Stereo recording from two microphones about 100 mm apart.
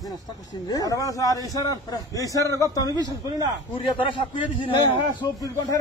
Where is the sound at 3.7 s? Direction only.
55° left (ahead or behind).